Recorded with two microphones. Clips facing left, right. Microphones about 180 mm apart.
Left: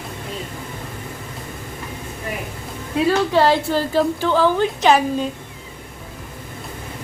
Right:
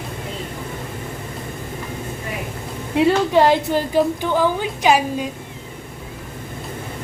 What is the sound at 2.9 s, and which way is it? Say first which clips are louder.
A woman's voice: right 2 dB; 20° right (ahead or behind).